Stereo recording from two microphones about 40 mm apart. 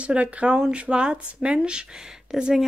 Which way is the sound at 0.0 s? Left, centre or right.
Right.